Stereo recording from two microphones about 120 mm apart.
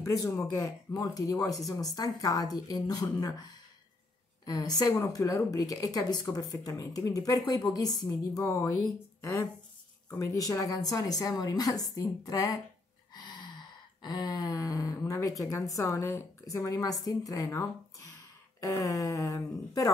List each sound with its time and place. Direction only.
0.5 s speech: 30° left (ahead or behind)
4.5 s speech: 30° left (ahead or behind)
13.1 s a sound: 40° left (ahead or behind)
18.6 s speech: 30° left (ahead or behind)